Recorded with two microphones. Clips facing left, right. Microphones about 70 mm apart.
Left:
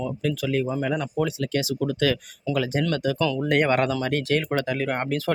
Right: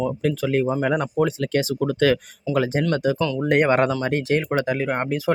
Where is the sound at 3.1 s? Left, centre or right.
Centre.